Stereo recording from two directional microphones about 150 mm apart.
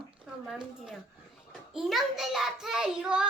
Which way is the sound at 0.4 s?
Centre (ahead or behind).